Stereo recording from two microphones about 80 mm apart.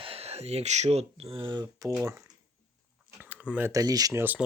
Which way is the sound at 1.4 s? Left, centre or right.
Right.